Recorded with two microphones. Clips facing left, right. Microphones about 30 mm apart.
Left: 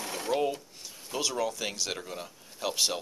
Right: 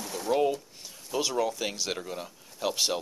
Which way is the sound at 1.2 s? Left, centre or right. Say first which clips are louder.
Right 2 dB; centre.